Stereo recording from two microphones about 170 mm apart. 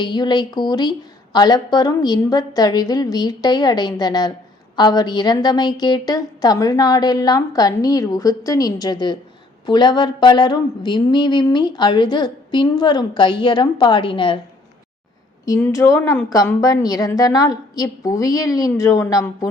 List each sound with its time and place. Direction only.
0.0 s a woman's voice: 25° left (ahead or behind)
15.4 s a woman's voice: 15° left (ahead or behind)